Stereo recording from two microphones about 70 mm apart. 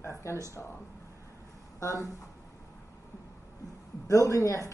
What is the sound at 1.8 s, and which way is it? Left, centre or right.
Speech, left.